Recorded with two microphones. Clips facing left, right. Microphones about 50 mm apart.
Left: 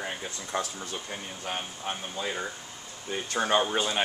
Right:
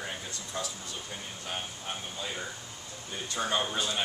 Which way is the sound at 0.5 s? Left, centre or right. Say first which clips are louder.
Left 6 dB; left.